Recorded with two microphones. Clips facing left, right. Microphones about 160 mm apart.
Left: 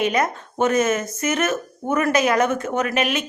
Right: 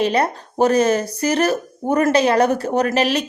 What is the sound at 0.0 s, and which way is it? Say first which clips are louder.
Speech: right 3 dB; 35° right (ahead or behind).